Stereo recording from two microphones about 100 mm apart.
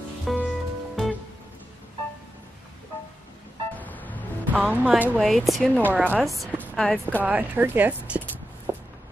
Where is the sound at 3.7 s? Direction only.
15° left (ahead or behind).